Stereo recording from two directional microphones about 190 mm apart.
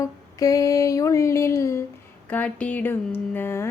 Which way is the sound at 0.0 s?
20° left (ahead or behind).